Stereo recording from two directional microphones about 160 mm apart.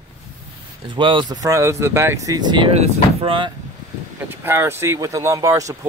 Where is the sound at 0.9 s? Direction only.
30° right (ahead or behind).